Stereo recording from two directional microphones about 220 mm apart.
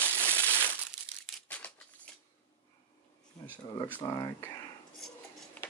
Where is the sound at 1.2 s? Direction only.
5° left (ahead or behind).